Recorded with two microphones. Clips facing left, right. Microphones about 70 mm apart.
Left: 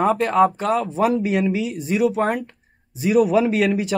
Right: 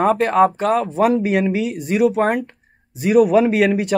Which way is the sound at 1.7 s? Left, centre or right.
Right.